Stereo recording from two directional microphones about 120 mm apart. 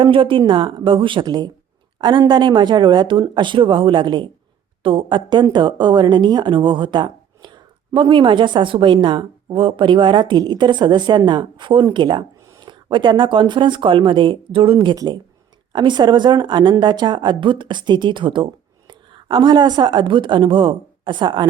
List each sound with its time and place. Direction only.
0.0 s speech: 45° right (ahead or behind)
14.9 s a woman's voice: 35° right (ahead or behind)